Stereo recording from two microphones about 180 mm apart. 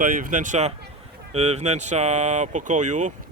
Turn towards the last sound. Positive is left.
turn(degrees=-40)  # may be behind; listen again after turning